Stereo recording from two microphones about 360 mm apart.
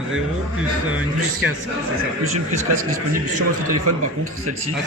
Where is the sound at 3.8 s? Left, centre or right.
Right.